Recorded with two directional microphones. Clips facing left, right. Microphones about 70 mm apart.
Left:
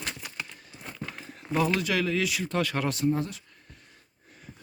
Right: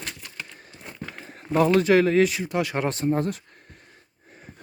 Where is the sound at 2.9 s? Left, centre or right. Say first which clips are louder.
Right 3 dB; right.